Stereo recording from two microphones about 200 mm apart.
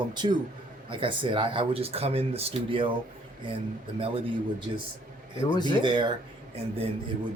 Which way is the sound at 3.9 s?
30° right (ahead or behind).